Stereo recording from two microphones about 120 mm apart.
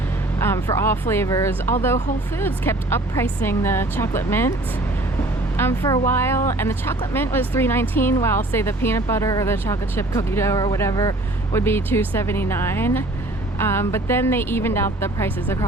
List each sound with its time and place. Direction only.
0.3 s speech: 20° left (ahead or behind)
5.5 s speech: 20° left (ahead or behind)